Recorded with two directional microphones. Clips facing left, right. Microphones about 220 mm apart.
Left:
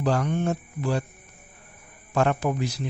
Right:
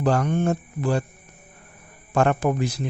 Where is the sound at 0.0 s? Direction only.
50° right (ahead or behind).